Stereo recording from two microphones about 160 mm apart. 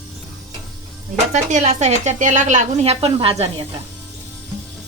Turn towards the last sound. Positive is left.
turn(degrees=-40)  # may be behind; listen again after turning